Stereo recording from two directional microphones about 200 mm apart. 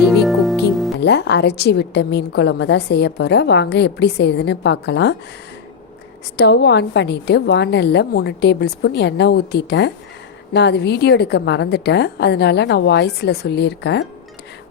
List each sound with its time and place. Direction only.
0.0 s music: centre (ahead or behind)
0.9 s a woman's voice: 60° left (ahead or behind)
6.3 s a woman's voice: 55° left (ahead or behind)